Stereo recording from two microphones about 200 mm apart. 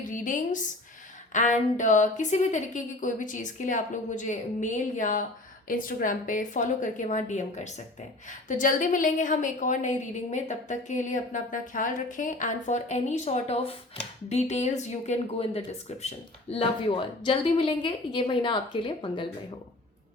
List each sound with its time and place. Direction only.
0.0 s a woman's voice: 40° left (ahead or behind); by 19.3 s 25° left (ahead or behind)